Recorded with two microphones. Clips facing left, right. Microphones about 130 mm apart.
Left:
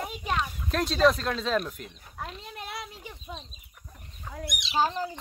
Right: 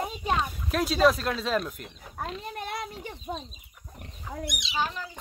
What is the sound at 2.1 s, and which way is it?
Speech, 45° right (ahead or behind).